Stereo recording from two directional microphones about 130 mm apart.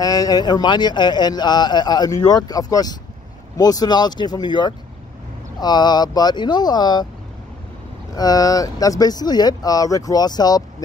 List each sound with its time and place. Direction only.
0.0 s a man's voice: 30° left (ahead or behind)
8.1 s speech: 30° left (ahead or behind)